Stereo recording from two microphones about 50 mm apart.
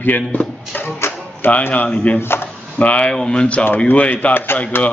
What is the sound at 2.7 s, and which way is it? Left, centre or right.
Speech, left.